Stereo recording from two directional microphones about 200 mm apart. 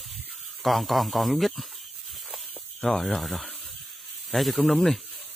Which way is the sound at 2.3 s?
Centre (ahead or behind).